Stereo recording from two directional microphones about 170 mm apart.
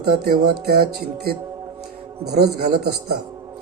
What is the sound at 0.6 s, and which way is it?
Speech, 65° right (ahead or behind).